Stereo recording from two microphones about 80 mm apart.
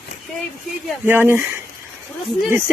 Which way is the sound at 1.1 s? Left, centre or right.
Right.